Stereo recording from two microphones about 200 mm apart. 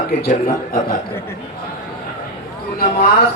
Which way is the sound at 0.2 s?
45° left (ahead or behind).